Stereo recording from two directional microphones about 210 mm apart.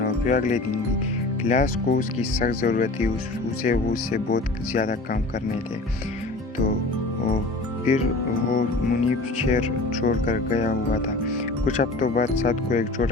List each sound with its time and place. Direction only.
0.0 s music: 40° left (ahead or behind)
1.5 s speech: 35° left (ahead or behind)
8.4 s speech: 40° left (ahead or behind)